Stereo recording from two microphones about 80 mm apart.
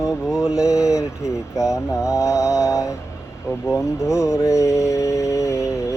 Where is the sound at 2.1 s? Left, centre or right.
Left.